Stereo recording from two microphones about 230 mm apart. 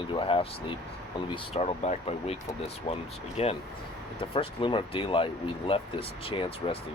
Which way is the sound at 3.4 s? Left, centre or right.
Left.